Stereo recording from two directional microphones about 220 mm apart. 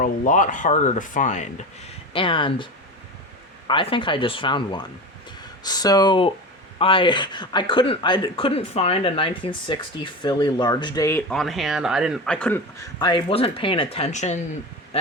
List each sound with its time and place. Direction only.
0.0 s speech: 35° left (ahead or behind)
2.1 s speech: 20° left (ahead or behind)
3.7 s speech: 25° left (ahead or behind)
11.3 s speech: centre (ahead or behind)
13.0 s speech: 20° left (ahead or behind)